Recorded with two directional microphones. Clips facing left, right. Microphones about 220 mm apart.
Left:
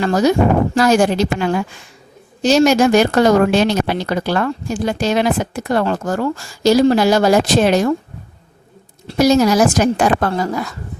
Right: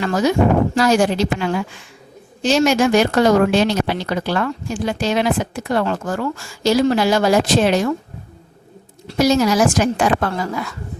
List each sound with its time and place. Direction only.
0.0 s speech: 40° left (ahead or behind)
0.8 s a woman's voice: 50° left (ahead or behind)
9.1 s speech: 40° left (ahead or behind)